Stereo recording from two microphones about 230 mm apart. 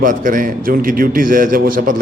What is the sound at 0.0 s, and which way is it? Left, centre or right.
A man's voice, right.